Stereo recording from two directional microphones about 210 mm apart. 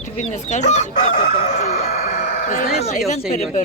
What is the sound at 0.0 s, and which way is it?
Chicken, 35° left (ahead or behind).